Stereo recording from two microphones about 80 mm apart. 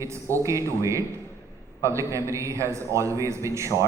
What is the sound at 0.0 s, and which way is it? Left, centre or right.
Speech, right.